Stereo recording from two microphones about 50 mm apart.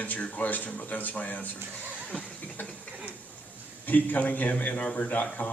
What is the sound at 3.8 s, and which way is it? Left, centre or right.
A man's voice, left.